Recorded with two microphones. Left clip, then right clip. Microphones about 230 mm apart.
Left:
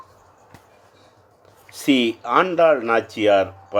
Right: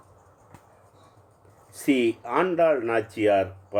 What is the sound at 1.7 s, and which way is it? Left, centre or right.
Speech, centre.